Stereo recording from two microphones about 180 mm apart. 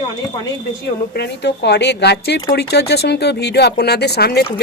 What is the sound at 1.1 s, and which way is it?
Speech, 70° left (ahead or behind).